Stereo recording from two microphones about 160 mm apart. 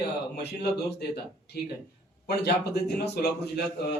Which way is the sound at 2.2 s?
90° left.